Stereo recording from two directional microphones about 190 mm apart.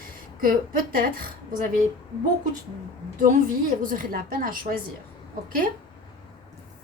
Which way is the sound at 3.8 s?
45° right (ahead or behind).